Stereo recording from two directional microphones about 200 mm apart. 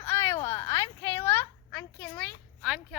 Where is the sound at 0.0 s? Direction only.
15° left (ahead or behind).